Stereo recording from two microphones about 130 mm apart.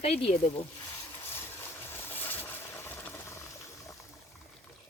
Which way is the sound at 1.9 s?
15° left (ahead or behind).